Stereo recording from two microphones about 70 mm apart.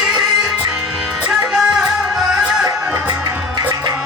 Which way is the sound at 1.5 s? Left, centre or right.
Centre.